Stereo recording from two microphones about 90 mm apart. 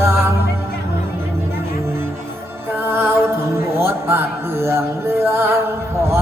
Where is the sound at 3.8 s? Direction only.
30° right (ahead or behind).